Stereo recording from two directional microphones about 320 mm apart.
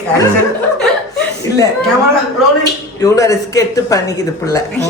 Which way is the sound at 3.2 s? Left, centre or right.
Centre.